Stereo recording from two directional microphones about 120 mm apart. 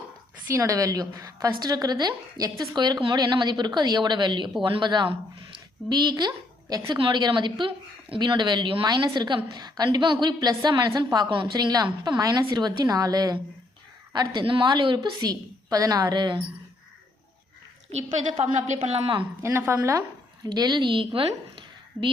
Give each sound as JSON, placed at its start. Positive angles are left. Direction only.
{"t": 0.4, "sound": "a woman's voice", "side_deg": -25}
{"t": 18.8, "sound": "a woman's voice", "side_deg": -50}
{"t": 19.4, "sound": "a woman's voice", "side_deg": -25}
{"t": 20.5, "sound": "a woman's voice", "side_deg": -35}